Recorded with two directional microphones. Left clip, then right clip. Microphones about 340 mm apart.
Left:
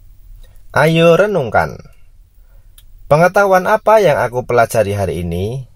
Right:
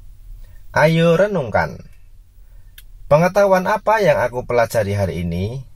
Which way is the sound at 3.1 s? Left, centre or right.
Left.